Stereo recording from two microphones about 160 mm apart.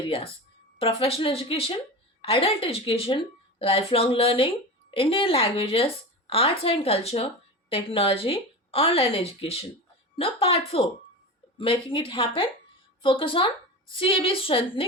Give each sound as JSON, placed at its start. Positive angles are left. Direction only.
{"t": 0.1, "sound": "a woman's voice", "side_deg": 35}